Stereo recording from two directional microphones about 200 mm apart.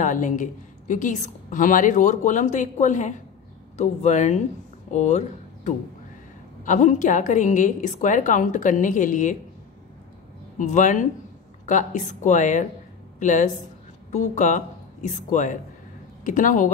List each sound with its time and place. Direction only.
0.0 s a woman's voice: 40° left (ahead or behind)
10.6 s a woman's voice: 40° left (ahead or behind)